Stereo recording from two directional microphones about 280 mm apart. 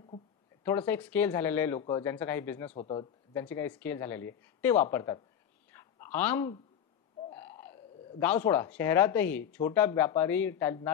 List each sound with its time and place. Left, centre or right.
0.7 s speech: centre
2.7 s speech: left
3.4 s speech: centre
5.7 s a sound: centre
7.2 s speech: centre